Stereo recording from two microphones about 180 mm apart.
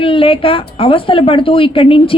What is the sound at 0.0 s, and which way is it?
A woman's voice, 30° left (ahead or behind).